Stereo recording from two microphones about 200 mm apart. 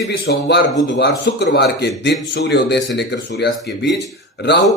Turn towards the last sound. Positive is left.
turn(degrees=60)  # may be behind; listen again after turning